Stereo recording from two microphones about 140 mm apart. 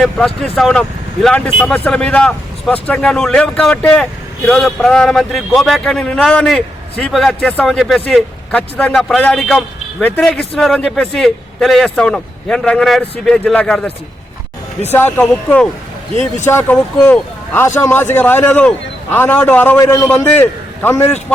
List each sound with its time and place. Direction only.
0.5 s a man's voice: 5° left (ahead or behind)
16.5 s speech: 20° left (ahead or behind)
19.8 s a man's voice: 25° left (ahead or behind)